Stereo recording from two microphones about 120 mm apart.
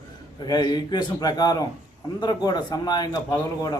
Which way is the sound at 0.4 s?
35° left (ahead or behind).